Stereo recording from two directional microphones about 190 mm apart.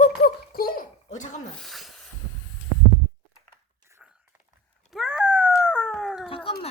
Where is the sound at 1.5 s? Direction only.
Centre (ahead or behind).